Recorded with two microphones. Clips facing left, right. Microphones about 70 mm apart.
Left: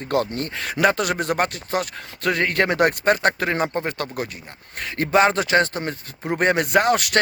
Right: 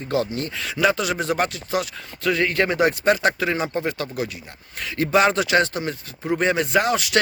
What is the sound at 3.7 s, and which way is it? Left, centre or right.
Speech, left.